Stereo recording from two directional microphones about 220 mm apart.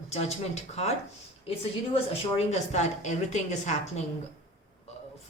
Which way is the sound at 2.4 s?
30° left (ahead or behind).